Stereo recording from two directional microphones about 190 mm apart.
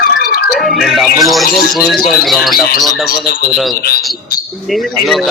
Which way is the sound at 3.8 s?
55° left (ahead or behind).